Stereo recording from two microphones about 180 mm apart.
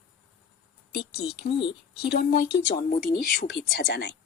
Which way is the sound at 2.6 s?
45° left (ahead or behind).